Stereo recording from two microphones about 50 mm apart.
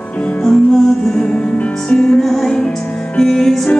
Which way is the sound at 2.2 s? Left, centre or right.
Centre.